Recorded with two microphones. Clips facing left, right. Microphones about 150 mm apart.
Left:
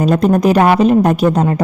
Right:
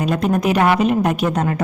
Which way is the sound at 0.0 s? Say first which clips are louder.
Left 6 dB; 40° left (ahead or behind).